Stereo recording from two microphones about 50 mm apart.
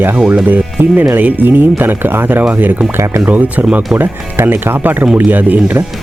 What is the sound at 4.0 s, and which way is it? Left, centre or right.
Speech, right.